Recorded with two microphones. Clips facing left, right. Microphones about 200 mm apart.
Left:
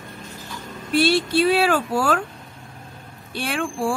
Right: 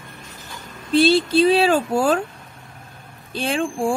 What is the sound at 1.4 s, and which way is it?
Speech, 20° right (ahead or behind).